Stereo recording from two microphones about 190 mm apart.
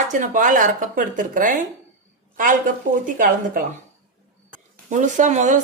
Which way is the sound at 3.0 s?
45° right (ahead or behind).